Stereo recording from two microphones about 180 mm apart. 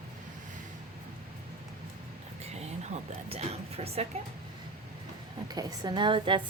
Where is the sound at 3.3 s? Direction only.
35° right (ahead or behind).